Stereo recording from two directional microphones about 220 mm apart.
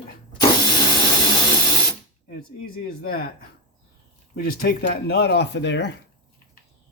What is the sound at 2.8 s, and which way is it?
Speech, 45° left (ahead or behind).